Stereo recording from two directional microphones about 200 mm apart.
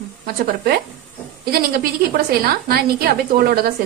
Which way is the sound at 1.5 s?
50° right (ahead or behind).